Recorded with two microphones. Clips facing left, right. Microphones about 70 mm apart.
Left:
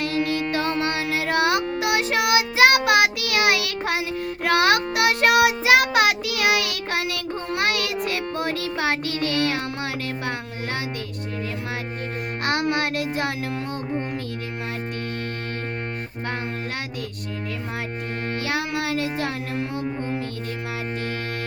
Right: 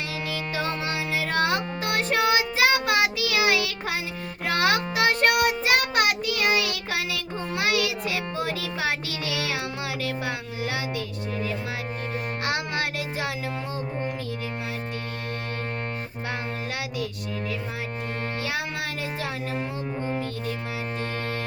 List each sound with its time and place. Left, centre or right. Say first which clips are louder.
0.0 s music: left 7 dB; left
2.3 s child singing: left 5 dB; left
10.0 s a sound: left 1 dB; left
12.5 s child singing: left 6 dB; left
18.4 s child singing: left 8 dB; left
19.5 s music: left 3 dB; centre